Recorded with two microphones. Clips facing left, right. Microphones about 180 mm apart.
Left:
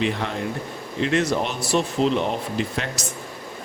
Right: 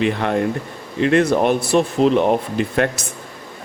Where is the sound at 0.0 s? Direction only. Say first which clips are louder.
Right 6 dB; 60° right (ahead or behind).